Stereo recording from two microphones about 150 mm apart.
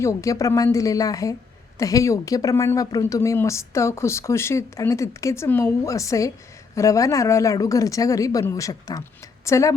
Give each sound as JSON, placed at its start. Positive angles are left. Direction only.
{"t": 0.0, "sound": "a woman's voice", "side_deg": 20}